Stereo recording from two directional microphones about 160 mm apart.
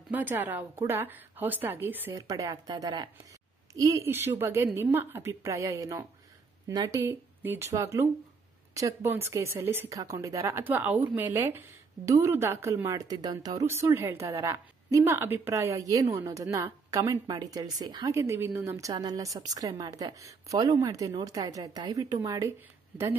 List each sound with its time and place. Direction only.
0.1 s a woman's voice: 10° right (ahead or behind)